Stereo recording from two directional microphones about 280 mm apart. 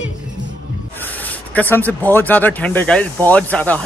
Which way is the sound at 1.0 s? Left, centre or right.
Centre.